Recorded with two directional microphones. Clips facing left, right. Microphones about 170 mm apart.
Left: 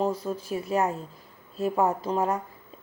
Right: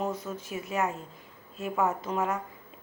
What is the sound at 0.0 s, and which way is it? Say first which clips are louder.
Speech: left 5 dB; 35° left (ahead or behind).